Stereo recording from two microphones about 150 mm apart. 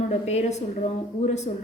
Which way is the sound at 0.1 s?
45° left (ahead or behind).